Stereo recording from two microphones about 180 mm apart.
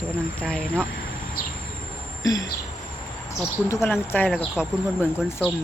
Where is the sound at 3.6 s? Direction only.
15° left (ahead or behind).